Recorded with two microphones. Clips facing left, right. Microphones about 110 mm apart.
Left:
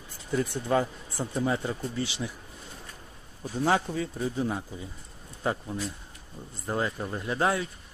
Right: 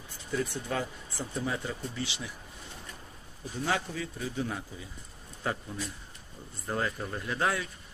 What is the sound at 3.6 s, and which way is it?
Speech, 35° left (ahead or behind).